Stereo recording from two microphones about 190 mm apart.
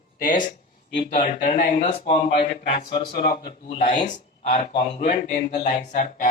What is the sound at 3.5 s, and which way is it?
Speech, 30° left (ahead or behind).